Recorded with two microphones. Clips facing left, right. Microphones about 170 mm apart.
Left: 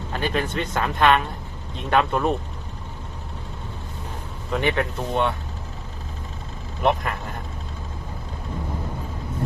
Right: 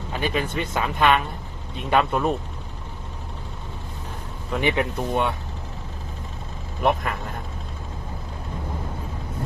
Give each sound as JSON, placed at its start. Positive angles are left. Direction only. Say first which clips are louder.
{"t": 0.1, "sound": "speech", "louder": "even", "side_deg": -10}
{"t": 4.6, "sound": "speech", "louder": "right 1 dB", "side_deg": -15}
{"t": 6.8, "sound": "speech", "louder": "even", "side_deg": 0}